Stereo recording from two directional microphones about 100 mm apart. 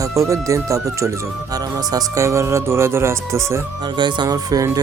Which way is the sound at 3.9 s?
50° right (ahead or behind).